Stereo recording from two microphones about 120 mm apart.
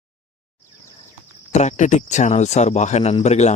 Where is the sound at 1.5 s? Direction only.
80° left.